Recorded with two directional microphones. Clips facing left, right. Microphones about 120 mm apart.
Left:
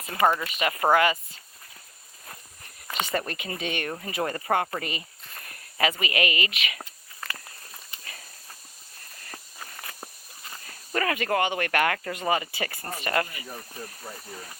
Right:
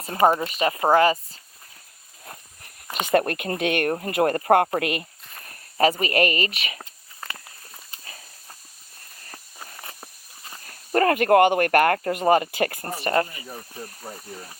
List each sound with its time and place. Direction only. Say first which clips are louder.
0.0 s speech: right 4 dB; 35° right (ahead or behind)
3.1 s speech: right 13 dB; 55° right (ahead or behind)
4.8 s speech: right 8 dB; 65° right (ahead or behind)
5.5 s speech: right 6 dB; 35° right (ahead or behind)
10.7 s speech: right 8 dB; 45° right (ahead or behind)
13.0 s speech: right 5 dB; 30° right (ahead or behind)